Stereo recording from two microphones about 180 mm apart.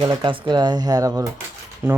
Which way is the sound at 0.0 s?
25° right (ahead or behind).